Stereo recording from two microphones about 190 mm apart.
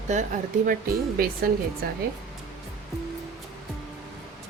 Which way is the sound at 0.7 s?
50° right (ahead or behind).